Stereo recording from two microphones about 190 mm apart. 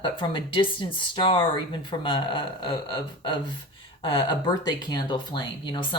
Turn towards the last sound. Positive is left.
turn(degrees=25)  # may be behind; listen again after turning